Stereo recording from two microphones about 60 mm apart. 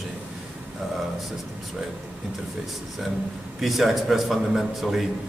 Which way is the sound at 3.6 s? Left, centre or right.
Centre.